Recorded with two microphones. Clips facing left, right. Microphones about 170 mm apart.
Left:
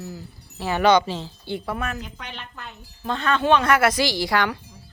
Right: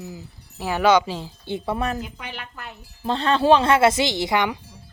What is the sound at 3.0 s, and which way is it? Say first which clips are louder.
Speech: right 3 dB; 30° right (ahead or behind).